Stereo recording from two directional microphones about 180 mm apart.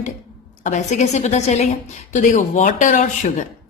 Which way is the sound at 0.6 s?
40° left (ahead or behind).